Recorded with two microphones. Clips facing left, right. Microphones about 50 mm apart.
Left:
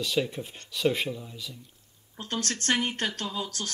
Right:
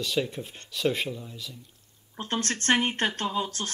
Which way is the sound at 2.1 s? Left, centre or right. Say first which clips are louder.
Right 2 dB; right.